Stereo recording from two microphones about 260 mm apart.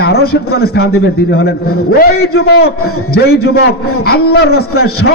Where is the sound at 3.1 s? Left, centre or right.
Left.